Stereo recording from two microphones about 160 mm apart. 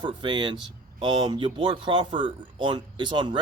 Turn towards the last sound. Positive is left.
turn(degrees=-30)  # may be behind; listen again after turning